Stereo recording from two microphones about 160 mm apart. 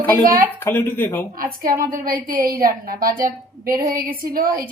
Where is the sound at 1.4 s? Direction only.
65° right (ahead or behind).